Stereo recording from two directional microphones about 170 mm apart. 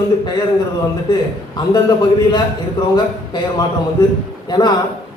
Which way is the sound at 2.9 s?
25° left (ahead or behind).